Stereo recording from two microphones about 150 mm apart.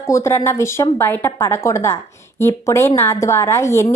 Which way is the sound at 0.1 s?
20° left (ahead or behind).